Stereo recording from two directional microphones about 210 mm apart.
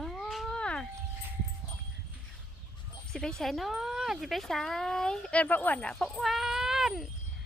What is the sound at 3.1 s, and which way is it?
Speech, centre (ahead or behind).